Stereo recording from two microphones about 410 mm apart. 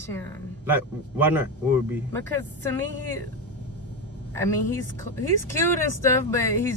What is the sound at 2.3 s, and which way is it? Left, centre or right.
Speech, centre.